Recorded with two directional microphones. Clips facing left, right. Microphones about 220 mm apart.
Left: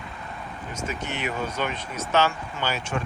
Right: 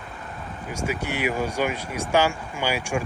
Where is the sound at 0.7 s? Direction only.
10° right (ahead or behind).